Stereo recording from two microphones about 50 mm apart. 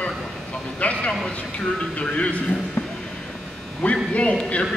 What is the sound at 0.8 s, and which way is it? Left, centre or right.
Speech, left.